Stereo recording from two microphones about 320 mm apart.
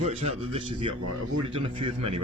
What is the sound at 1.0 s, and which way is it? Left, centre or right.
Speech, right.